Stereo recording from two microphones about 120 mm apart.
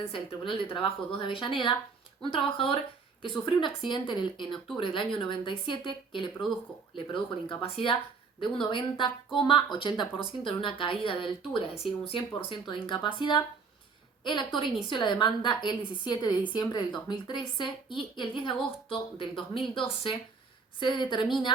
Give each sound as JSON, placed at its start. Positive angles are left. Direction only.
{"t": 0.1, "sound": "a woman's voice", "side_deg": 45}